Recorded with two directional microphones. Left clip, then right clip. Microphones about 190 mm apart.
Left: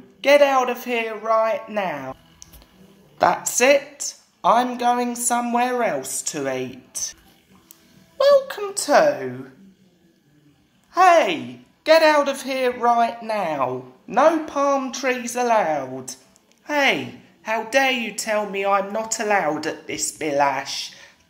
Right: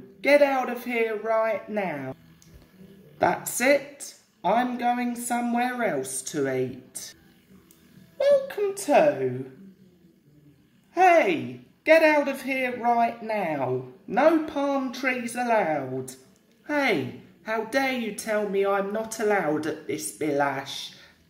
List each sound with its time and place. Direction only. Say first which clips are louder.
0.2 s a woman's voice: left 5 dB; 15° right (ahead or behind)
8.2 s a woman's voice: left 5 dB; 15° right (ahead or behind)
10.9 s a woman's voice: left 4 dB; 15° right (ahead or behind)